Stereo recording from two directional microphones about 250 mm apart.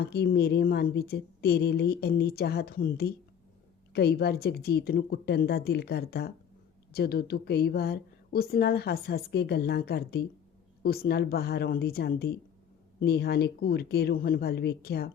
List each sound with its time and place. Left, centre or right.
0.0 s a woman's voice: left